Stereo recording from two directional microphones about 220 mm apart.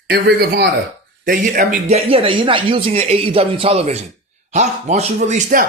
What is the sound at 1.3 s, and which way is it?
Speech, 40° right (ahead or behind).